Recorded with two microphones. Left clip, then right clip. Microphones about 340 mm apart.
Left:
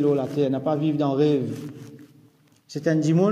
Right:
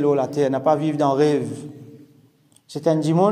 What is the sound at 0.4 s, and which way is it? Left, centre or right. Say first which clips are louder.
A man's voice: right 5 dB; centre.